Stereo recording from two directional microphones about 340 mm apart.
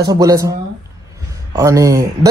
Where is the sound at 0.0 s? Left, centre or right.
Centre.